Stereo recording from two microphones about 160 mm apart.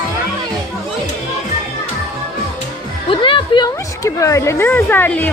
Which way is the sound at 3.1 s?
30° left (ahead or behind).